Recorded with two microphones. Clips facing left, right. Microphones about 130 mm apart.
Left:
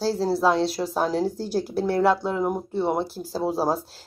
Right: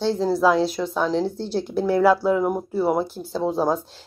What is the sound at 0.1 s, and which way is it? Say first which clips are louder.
Speech: right 3 dB; 5° left (ahead or behind).